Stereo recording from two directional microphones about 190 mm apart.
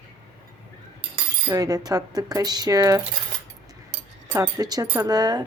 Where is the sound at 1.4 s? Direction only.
20° right (ahead or behind).